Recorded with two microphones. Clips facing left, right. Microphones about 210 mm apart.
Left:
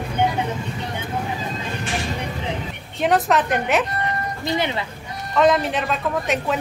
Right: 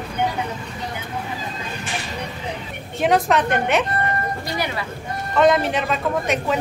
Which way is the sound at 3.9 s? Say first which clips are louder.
Right 2 dB; 50° right (ahead or behind).